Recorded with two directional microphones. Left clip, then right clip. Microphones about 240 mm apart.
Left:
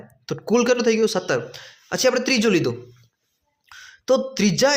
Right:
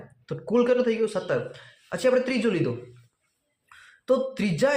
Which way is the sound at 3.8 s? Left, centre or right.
Left.